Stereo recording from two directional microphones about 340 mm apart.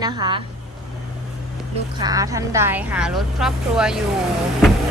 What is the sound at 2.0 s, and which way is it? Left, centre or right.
A woman's voice, centre.